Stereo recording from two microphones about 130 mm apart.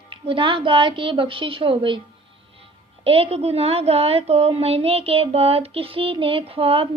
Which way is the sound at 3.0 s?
50° right (ahead or behind).